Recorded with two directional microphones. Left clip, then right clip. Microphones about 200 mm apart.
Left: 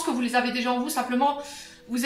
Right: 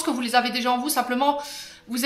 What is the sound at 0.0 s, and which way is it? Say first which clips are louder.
Speech: right 3 dB; 40° right (ahead or behind).